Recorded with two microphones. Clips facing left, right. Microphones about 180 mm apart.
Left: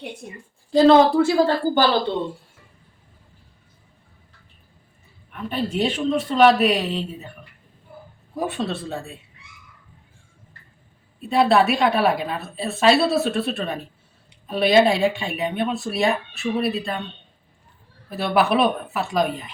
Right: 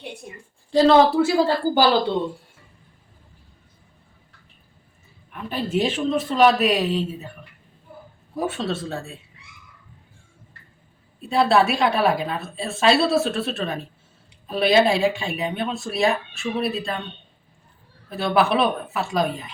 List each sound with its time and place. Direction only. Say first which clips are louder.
0.7 s a woman's voice: left 1 dB; centre (ahead or behind)
5.3 s a woman's voice: right 1 dB; 5° right (ahead or behind)
8.4 s a woman's voice: even; centre (ahead or behind)
11.2 s a woman's voice: left 1 dB; centre (ahead or behind)
18.1 s a woman's voice: even; centre (ahead or behind)